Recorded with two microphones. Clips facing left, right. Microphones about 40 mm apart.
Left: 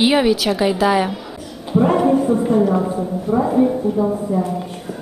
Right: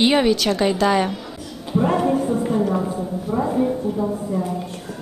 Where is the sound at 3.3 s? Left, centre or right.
Centre.